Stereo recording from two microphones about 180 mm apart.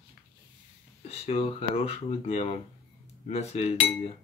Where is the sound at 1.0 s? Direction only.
35° left (ahead or behind).